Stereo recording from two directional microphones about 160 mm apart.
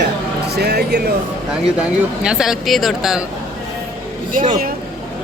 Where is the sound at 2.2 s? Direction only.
5° right (ahead or behind).